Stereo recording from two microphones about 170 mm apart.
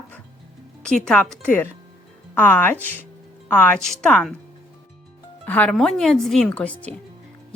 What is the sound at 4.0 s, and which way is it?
Speech, 5° left (ahead or behind).